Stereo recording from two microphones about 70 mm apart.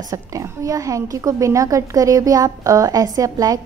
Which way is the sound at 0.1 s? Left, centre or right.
Right.